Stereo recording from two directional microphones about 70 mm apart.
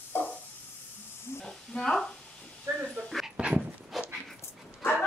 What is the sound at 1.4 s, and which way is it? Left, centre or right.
Speech, centre.